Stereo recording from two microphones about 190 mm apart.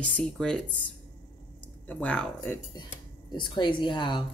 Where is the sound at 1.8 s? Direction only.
10° left (ahead or behind).